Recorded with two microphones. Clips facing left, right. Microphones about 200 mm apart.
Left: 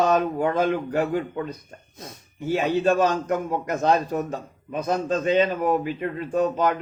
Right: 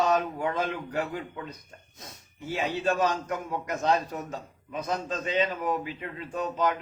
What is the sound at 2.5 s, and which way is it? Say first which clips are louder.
A man's voice: left 6 dB; 50° left (ahead or behind).